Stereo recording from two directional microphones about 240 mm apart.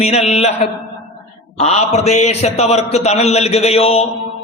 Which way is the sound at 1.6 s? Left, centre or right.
Left.